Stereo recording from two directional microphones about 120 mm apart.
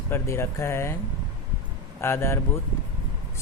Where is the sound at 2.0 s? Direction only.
20° left (ahead or behind).